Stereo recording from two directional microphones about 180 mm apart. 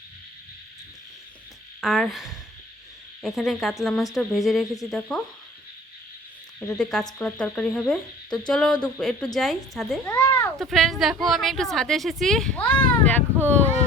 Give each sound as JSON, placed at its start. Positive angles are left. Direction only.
{"t": 1.8, "sound": "speech", "side_deg": 0}
{"t": 6.6, "sound": "speech", "side_deg": 5}
{"t": 10.1, "sound": "a sound", "side_deg": 15}
{"t": 10.6, "sound": "speech", "side_deg": 0}